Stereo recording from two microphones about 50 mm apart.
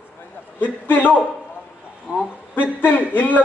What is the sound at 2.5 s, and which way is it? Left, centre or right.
Speech, left.